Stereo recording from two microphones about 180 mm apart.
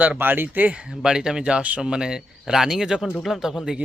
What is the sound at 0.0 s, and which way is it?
Speech, 10° right (ahead or behind).